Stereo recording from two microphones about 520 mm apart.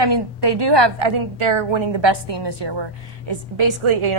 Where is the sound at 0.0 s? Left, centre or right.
Right.